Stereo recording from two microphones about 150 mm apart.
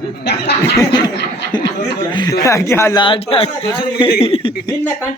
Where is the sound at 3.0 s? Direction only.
35° left (ahead or behind).